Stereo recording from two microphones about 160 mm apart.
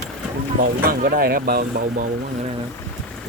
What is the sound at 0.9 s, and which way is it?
Speech, 65° right (ahead or behind).